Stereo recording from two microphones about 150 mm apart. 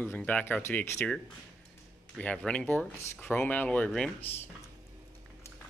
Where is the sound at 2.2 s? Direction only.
10° left (ahead or behind).